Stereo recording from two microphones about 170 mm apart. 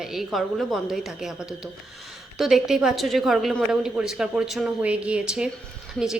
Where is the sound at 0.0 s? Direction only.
Centre (ahead or behind).